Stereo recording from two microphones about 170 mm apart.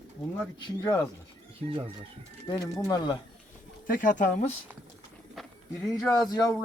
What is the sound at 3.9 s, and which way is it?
Speech, 50° left (ahead or behind).